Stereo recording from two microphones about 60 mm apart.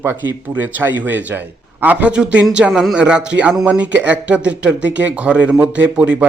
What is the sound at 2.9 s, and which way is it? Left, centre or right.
A man's voice, centre.